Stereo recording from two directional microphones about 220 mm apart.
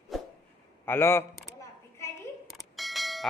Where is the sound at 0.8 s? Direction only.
10° left (ahead or behind).